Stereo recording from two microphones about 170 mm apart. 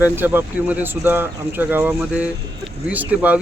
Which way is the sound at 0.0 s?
10° right (ahead or behind).